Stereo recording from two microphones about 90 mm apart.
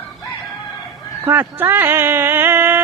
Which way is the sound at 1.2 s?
25° right (ahead or behind).